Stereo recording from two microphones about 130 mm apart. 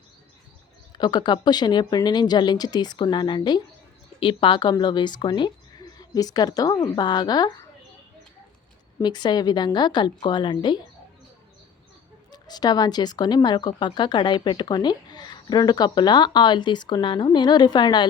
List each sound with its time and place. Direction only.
0.9 s speech: 35° left (ahead or behind)
9.0 s speech: 35° left (ahead or behind)
12.3 s speech: 30° left (ahead or behind)